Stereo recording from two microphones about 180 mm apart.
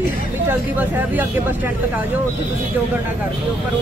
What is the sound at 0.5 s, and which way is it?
Speech, 10° right (ahead or behind).